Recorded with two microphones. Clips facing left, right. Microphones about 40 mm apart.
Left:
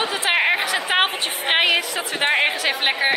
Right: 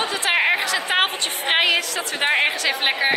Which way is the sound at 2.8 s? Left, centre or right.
Centre.